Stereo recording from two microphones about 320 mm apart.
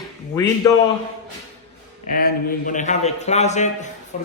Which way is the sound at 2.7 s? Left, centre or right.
Left.